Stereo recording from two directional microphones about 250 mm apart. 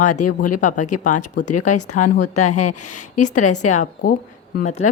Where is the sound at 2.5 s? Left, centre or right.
Left.